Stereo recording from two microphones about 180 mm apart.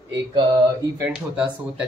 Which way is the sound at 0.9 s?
10° right (ahead or behind).